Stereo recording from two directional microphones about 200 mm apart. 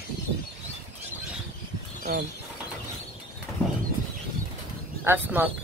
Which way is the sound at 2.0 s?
45° right (ahead or behind).